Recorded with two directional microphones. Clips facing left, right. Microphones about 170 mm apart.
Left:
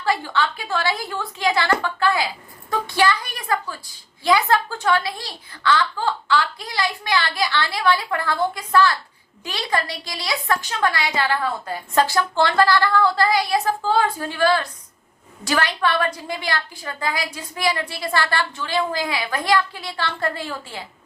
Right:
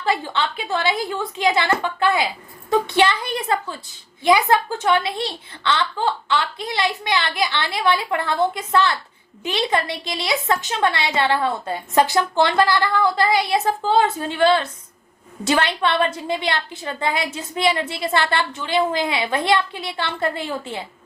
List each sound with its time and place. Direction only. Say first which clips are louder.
0.0 s a woman's voice: even; 20° right (ahead or behind)